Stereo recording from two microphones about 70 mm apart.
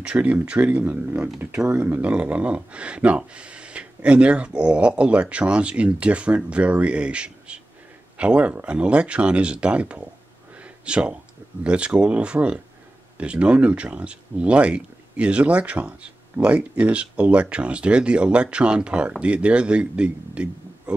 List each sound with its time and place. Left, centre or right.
0.0 s speech: centre
2.0 s speech: centre
10.6 s a sound: centre
11.6 s speech: centre